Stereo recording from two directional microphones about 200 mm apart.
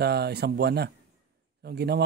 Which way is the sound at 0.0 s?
55° right (ahead or behind).